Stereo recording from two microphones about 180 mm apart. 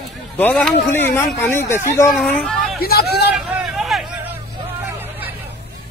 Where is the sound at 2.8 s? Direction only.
60° left (ahead or behind).